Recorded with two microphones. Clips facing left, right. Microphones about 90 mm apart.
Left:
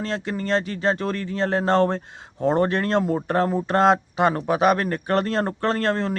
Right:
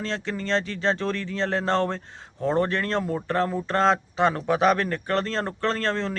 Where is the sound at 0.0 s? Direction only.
10° left (ahead or behind).